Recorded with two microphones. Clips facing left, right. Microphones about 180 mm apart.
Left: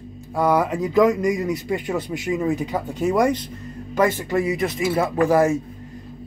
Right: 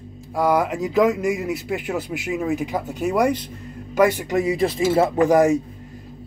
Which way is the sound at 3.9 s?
15° right (ahead or behind).